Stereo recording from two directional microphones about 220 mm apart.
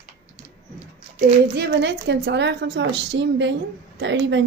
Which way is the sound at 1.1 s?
30° right (ahead or behind).